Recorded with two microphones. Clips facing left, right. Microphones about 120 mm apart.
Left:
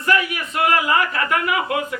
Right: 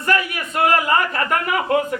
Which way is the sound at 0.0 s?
40° right (ahead or behind).